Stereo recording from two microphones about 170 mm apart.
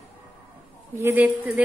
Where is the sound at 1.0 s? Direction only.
10° right (ahead or behind).